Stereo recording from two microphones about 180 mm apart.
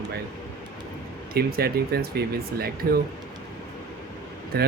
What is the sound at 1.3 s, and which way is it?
Speech, 60° right (ahead or behind).